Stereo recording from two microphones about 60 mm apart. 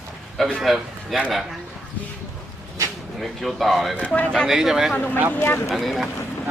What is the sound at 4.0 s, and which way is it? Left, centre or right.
Speech, left.